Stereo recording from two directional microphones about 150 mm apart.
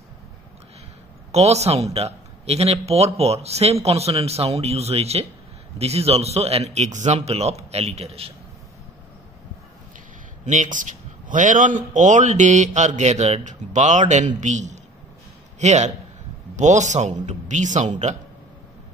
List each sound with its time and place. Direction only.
1.3 s a man's voice: 45° right (ahead or behind)
10.4 s a man's voice: 55° right (ahead or behind)